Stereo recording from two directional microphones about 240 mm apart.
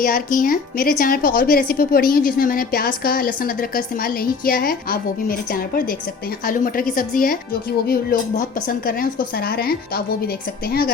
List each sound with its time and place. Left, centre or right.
0.0 s a woman's voice: left